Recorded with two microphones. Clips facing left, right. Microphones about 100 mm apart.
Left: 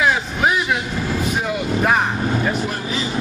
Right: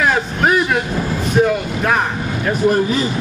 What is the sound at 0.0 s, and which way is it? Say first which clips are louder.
Vehicle: right 2 dB; 5° left (ahead or behind).